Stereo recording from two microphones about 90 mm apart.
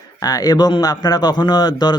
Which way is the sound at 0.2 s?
45° left (ahead or behind).